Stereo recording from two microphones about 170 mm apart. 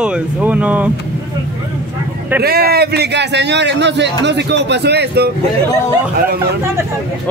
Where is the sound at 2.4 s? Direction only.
65° right (ahead or behind).